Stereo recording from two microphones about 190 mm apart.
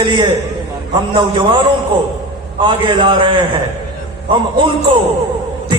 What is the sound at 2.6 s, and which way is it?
Speech, 25° right (ahead or behind).